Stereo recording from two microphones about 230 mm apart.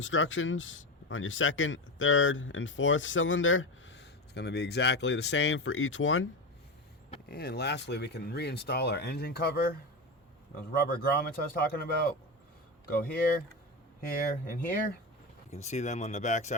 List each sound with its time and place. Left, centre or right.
0.0 s speech: left
7.3 s speech: left